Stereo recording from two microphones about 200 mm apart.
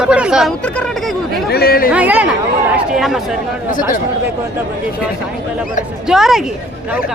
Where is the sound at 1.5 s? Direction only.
50° left (ahead or behind).